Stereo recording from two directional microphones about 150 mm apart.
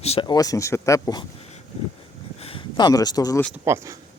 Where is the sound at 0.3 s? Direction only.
25° left (ahead or behind).